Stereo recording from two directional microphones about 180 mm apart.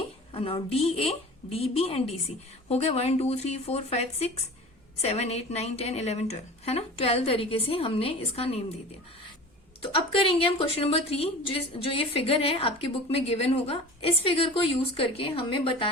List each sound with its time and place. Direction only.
0.3 s a woman's voice: 30° left (ahead or behind)
9.9 s a woman's voice: 30° left (ahead or behind)